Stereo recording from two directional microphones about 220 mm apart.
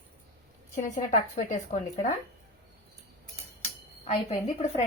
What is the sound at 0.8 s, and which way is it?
Speech, 35° left (ahead or behind).